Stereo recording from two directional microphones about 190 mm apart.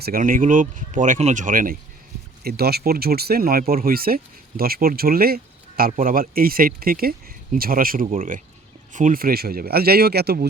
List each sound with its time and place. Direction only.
0.0 s speech: 50° right (ahead or behind)